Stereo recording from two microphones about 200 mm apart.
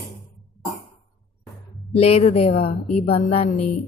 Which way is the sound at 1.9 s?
30° left (ahead or behind).